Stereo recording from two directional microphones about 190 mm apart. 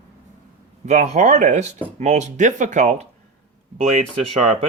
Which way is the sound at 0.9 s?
40° right (ahead or behind).